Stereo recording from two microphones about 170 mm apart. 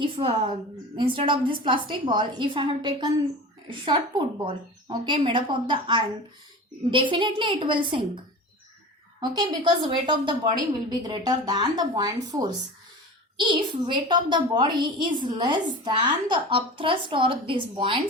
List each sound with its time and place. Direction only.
0.0 s a woman's voice: 35° right (ahead or behind)
9.2 s a woman's voice: 25° right (ahead or behind)